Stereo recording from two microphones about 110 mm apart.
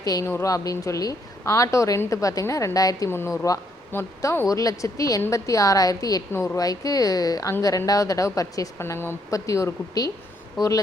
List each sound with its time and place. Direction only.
0.0 s a woman's voice: 35° left (ahead or behind)
3.1 s a woman's voice: 20° left (ahead or behind)